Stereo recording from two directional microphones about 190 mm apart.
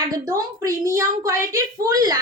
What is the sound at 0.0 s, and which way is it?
A woman's voice, 20° right (ahead or behind).